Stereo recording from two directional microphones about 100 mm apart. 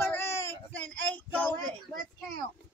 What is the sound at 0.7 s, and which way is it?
Speech, 15° left (ahead or behind).